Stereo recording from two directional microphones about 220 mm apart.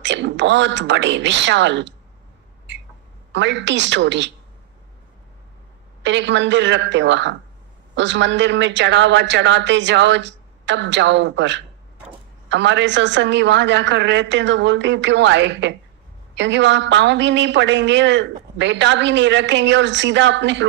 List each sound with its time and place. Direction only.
0.0 s a man's voice: 55° right (ahead or behind)
3.3 s a man's voice: 55° right (ahead or behind)
6.0 s a man's voice: 55° right (ahead or behind)